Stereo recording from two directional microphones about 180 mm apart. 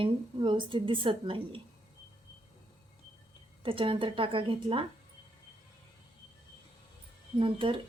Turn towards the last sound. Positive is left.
turn(degrees=-30)  # may be behind; listen again after turning